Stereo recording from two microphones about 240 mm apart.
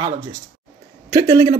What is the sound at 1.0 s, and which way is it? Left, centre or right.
Speech, centre.